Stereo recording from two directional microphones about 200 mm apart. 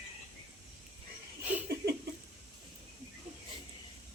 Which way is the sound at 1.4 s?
10° right (ahead or behind).